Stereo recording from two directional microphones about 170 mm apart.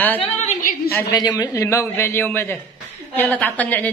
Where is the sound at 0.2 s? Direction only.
40° left (ahead or behind).